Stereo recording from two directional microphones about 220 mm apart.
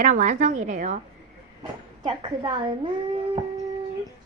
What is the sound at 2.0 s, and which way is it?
Speech, 20° right (ahead or behind).